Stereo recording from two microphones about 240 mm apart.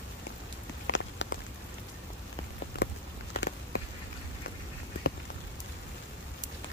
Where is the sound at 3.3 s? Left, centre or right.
Left.